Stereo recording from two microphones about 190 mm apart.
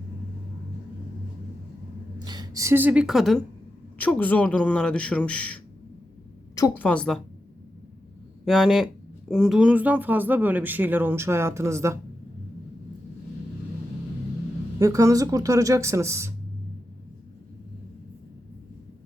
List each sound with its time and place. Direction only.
2.1 s a man's voice: 25° right (ahead or behind); by 5.5 s 5° left (ahead or behind)
6.6 s a woman's voice: 5° left (ahead or behind)
8.4 s a woman's voice: centre (ahead or behind)
14.8 s speech: 15° right (ahead or behind)